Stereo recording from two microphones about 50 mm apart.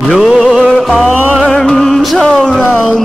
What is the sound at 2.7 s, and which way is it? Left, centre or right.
Speech, centre.